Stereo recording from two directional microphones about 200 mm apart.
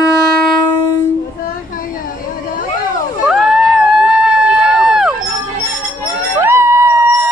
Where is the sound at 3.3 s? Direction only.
Centre (ahead or behind).